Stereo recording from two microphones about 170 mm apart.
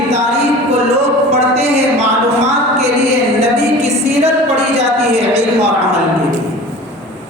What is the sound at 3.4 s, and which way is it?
Music, 40° right (ahead or behind).